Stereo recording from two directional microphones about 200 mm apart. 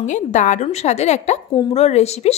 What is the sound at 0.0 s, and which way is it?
Speech, 35° left (ahead or behind).